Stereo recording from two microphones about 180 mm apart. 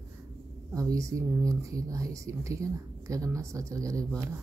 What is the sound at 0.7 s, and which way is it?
Speech, 20° right (ahead or behind).